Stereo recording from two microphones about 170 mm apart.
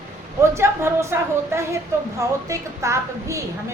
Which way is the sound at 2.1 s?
20° right (ahead or behind).